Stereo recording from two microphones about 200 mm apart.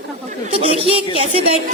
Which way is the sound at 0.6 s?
30° left (ahead or behind).